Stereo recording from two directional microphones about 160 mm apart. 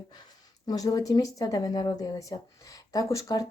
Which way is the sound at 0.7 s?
25° left (ahead or behind).